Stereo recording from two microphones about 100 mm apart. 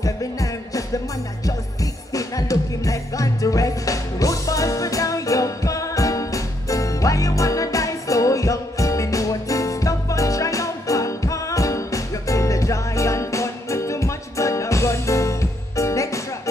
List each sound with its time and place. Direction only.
0.0 s music: 35° left (ahead or behind)